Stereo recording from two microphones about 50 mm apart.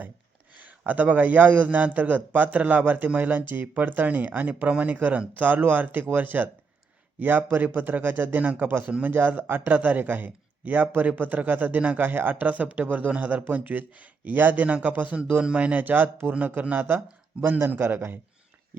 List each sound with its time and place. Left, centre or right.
0.5 s speech: right
15.8 s speech: right
17.7 s a man's voice: right